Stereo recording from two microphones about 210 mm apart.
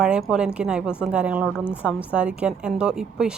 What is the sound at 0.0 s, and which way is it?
A woman's voice, 5° right (ahead or behind).